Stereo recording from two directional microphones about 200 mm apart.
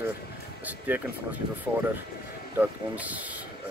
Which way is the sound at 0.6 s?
10° right (ahead or behind).